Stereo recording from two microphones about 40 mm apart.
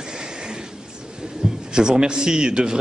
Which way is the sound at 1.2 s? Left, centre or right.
Centre.